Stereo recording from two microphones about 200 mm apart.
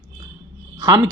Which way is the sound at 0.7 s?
20° right (ahead or behind).